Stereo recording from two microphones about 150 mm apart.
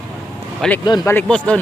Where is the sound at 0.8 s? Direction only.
30° left (ahead or behind).